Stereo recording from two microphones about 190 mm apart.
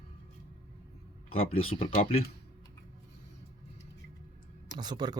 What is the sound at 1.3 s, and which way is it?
Speech, 90° left.